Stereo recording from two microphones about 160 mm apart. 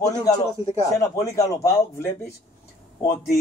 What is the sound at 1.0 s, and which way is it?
A man's voice, 20° left (ahead or behind).